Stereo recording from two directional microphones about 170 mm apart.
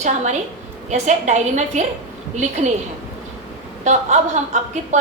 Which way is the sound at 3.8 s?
45° right (ahead or behind).